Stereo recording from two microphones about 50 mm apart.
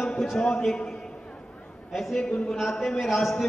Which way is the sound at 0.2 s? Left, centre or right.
Centre.